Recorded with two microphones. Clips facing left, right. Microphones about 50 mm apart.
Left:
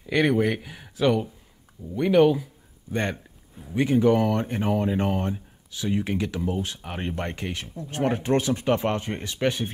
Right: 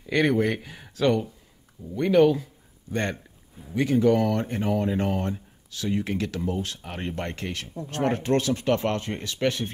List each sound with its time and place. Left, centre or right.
0.0 s speech: centre
3.7 s speech: left